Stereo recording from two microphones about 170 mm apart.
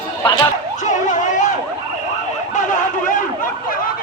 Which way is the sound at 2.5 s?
45° left (ahead or behind).